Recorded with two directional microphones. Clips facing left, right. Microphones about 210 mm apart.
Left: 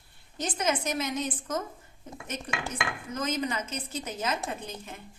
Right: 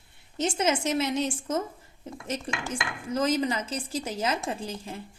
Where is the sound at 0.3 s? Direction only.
25° right (ahead or behind).